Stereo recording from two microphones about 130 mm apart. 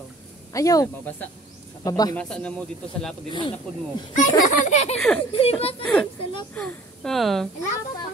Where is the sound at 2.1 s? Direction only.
10° left (ahead or behind).